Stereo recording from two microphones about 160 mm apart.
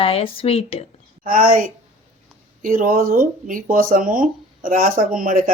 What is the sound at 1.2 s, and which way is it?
Speech, 60° right (ahead or behind).